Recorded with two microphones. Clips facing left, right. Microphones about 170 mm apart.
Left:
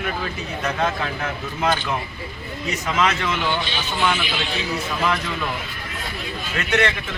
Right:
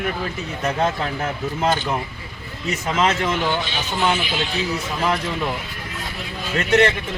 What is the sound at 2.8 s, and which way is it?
Speech, 30° right (ahead or behind).